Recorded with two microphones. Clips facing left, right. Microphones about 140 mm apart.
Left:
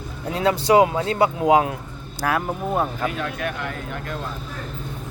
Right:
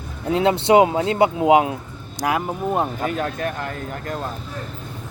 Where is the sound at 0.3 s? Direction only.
25° right (ahead or behind).